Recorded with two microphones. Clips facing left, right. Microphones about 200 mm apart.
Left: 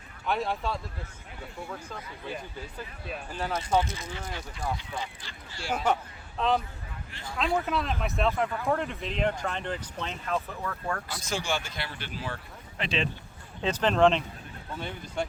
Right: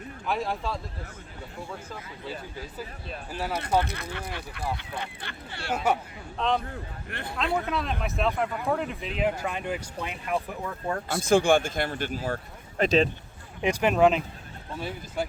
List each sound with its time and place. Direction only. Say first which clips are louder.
0.3 s speech: even; centre (ahead or behind)
3.3 s speech: right 1 dB; 10° right (ahead or behind)
3.8 s speech: right 1 dB; 60° right (ahead or behind)
5.7 s speech: right 1 dB; 10° right (ahead or behind)
6.3 s speech: even; 5° left (ahead or behind)
7.1 s speech: right 6 dB; 60° right (ahead or behind)
7.3 s speech: even; centre (ahead or behind); by 11.0 s 20° right (ahead or behind)
11.1 s speech: right 15 dB; 55° right (ahead or behind)
13.6 s speech: right 2 dB; 10° right (ahead or behind)